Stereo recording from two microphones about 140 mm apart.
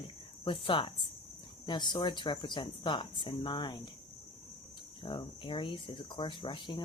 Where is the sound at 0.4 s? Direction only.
35° left (ahead or behind).